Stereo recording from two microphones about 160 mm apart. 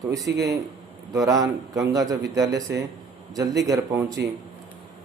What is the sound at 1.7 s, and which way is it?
A man's voice, 20° right (ahead or behind).